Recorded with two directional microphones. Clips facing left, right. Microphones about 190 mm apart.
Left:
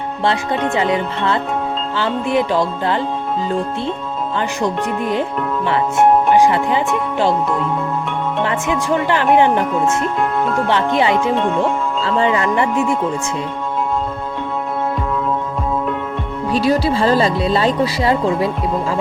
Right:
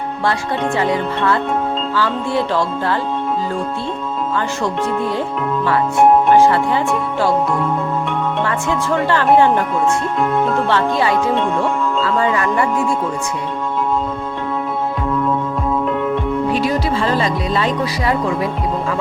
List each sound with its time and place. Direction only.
0.8 s speech: 20° left (ahead or behind)
4.4 s speech: 20° left (ahead or behind)
6.3 s speech: 15° left (ahead or behind)
8.4 s speech: 20° left (ahead or behind)
10.7 s speech: 20° left (ahead or behind)
16.5 s speech: 35° left (ahead or behind)